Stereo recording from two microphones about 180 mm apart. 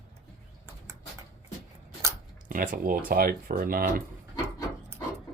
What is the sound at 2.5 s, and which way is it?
Speech, 50° right (ahead or behind).